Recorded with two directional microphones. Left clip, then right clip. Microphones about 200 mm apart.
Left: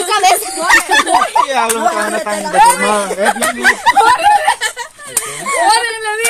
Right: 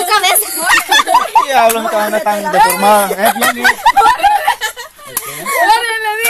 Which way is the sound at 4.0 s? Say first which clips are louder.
Even; 5° right (ahead or behind).